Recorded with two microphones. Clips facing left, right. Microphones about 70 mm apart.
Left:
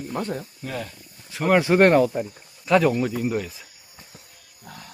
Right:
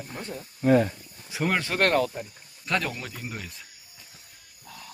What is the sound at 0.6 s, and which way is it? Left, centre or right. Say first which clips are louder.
Speech: right 12 dB; right.